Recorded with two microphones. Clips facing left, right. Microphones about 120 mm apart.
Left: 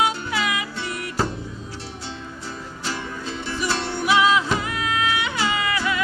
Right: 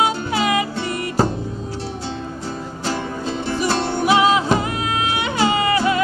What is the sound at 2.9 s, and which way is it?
Music, 45° right (ahead or behind).